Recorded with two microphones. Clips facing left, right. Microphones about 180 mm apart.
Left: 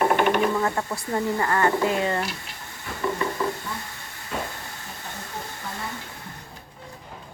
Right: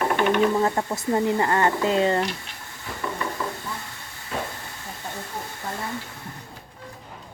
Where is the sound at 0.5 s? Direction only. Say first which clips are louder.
Right 2 dB; 25° right (ahead or behind).